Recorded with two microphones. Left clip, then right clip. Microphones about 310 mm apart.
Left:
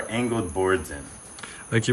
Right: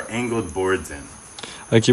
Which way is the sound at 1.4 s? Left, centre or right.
Centre.